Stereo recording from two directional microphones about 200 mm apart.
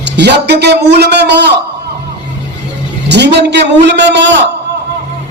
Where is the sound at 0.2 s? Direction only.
55° right (ahead or behind).